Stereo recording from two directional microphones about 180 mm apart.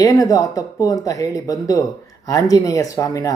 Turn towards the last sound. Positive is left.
turn(degrees=20)  # may be behind; listen again after turning